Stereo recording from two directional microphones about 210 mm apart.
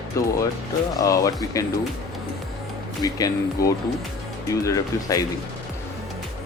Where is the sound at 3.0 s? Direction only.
15° left (ahead or behind).